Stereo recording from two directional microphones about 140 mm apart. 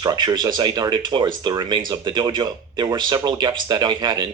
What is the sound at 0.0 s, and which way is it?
Speech, 30° right (ahead or behind).